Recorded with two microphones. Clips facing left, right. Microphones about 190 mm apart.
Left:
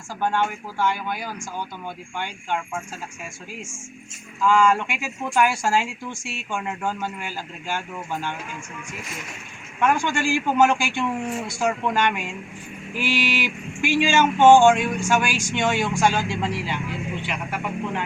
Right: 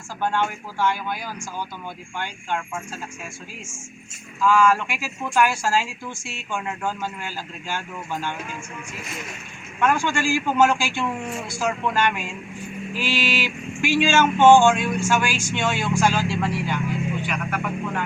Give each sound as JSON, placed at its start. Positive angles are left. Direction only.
{"t": 0.2, "sound": "speech", "side_deg": 15}
{"t": 4.4, "sound": "speech", "side_deg": 15}
{"t": 9.8, "sound": "speech", "side_deg": 15}